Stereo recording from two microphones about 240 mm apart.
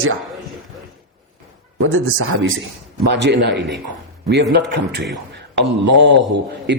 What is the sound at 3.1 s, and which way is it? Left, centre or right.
Speech, right.